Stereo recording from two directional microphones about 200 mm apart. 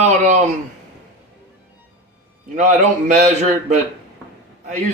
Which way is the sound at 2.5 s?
40° right (ahead or behind).